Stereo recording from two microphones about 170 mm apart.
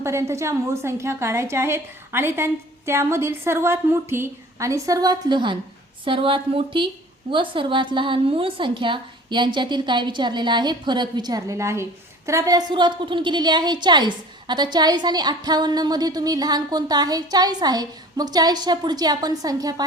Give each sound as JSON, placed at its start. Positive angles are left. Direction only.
{"t": 0.0, "sound": "a woman's voice", "side_deg": -15}